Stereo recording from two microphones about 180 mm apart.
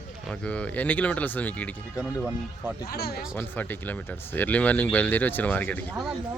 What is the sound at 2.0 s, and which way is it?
Speech, 5° right (ahead or behind).